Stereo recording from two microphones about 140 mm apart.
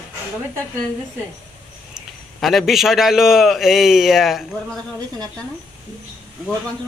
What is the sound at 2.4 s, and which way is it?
A man's voice, centre (ahead or behind).